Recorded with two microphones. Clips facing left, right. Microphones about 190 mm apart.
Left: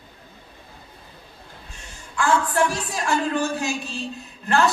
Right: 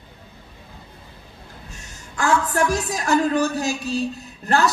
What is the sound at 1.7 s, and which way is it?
A man's voice, 45° right (ahead or behind).